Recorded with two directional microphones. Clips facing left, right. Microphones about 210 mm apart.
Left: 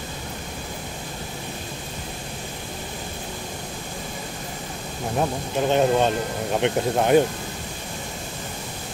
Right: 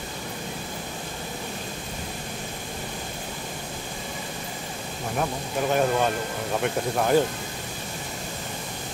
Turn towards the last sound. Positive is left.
turn(degrees=20)  # may be behind; listen again after turning